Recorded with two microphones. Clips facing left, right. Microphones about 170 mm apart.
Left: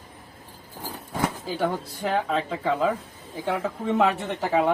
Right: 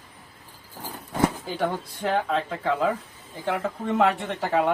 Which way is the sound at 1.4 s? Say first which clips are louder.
Left 1 dB; centre (ahead or behind).